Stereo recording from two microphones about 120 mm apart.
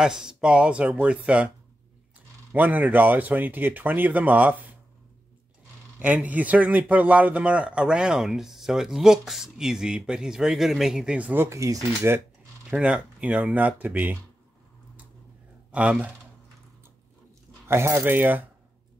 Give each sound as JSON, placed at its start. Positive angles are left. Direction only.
{"t": 0.0, "sound": "a man's voice", "side_deg": -5}
{"t": 2.5, "sound": "a man's voice", "side_deg": -15}
{"t": 5.9, "sound": "a man's voice", "side_deg": -10}
{"t": 12.6, "sound": "a man's voice", "side_deg": -10}
{"t": 15.7, "sound": "a man's voice", "side_deg": -10}
{"t": 17.6, "sound": "a man's voice", "side_deg": -20}